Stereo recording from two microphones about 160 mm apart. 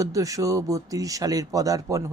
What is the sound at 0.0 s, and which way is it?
Speech, 20° right (ahead or behind).